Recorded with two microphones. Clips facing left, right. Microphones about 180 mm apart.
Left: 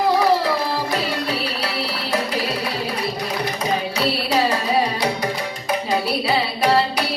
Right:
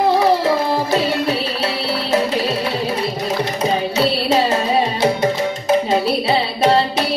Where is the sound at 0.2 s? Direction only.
25° right (ahead or behind).